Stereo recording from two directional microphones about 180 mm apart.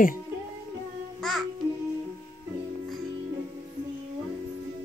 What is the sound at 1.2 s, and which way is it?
Babbling, centre (ahead or behind).